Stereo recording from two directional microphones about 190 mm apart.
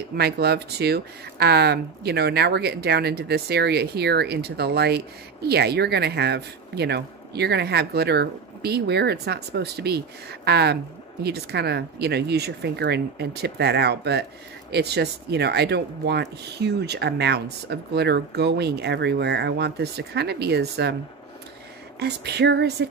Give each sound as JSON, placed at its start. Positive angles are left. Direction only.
{"t": 0.1, "sound": "speech", "side_deg": -55}
{"t": 22.0, "sound": "speech", "side_deg": -60}